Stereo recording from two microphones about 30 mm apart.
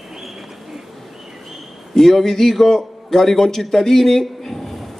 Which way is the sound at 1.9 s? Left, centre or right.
Centre.